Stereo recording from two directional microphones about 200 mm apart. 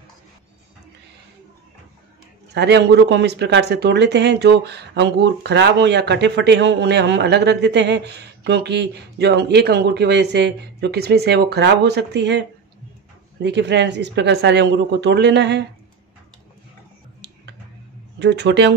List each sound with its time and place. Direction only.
2.5 s speech: 55° right (ahead or behind)
18.2 s speech: 60° right (ahead or behind)